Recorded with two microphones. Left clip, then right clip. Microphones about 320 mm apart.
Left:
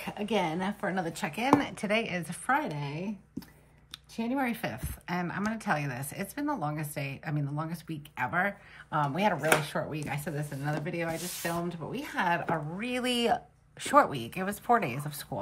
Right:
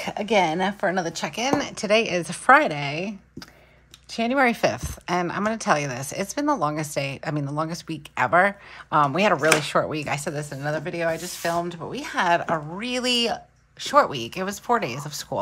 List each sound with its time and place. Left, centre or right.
0.0 s a woman's voice: right; by 15.3 s centre